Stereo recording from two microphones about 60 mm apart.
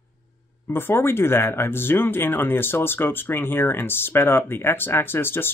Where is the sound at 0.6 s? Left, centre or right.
Left.